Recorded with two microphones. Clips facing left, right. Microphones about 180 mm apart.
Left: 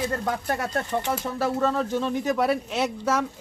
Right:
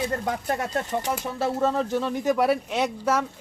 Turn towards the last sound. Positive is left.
turn(degrees=-15)  # may be behind; listen again after turning